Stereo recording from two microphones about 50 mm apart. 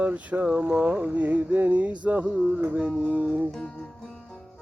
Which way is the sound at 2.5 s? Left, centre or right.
Right.